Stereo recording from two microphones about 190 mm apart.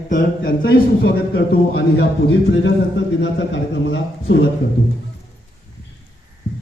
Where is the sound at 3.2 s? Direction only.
70° left (ahead or behind).